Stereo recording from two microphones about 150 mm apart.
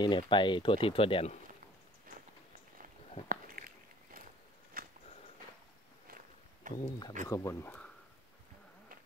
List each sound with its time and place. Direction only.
0.0 s speech: 30° left (ahead or behind)
3.3 s a sound: 70° right (ahead or behind)
4.8 s walk: 75° right (ahead or behind)
6.7 s speech: 30° left (ahead or behind)